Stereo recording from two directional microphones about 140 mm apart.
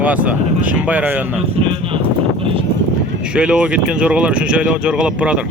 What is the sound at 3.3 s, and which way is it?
Speech, 5° right (ahead or behind).